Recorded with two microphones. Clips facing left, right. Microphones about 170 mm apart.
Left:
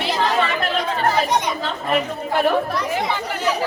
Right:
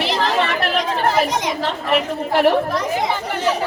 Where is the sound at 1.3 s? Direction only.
90° right.